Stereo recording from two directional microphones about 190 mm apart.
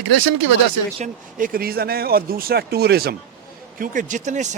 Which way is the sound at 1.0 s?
45° right (ahead or behind).